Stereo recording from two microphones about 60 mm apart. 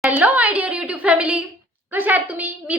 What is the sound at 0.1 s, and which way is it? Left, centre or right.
A woman's voice, right.